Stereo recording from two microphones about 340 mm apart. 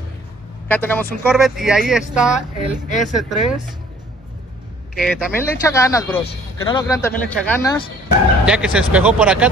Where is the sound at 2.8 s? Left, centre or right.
Left.